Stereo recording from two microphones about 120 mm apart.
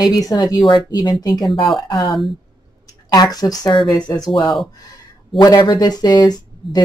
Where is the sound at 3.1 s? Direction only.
30° left (ahead or behind).